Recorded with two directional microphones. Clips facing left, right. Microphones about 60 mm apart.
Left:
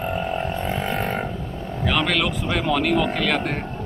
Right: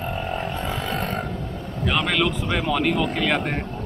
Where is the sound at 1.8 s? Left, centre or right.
Centre.